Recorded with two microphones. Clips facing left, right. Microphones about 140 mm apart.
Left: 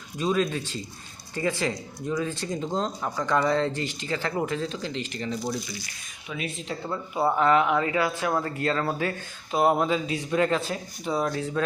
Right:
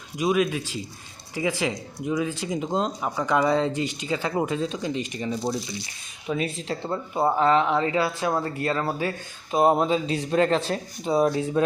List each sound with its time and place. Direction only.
0.2 s speech: 10° right (ahead or behind)
5.3 s speech: 25° right (ahead or behind)
6.2 s speech: 35° right (ahead or behind)
11.0 s speech: 25° right (ahead or behind)